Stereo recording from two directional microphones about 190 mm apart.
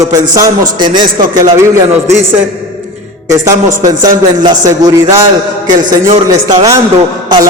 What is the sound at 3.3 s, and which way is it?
A man's voice, 15° right (ahead or behind).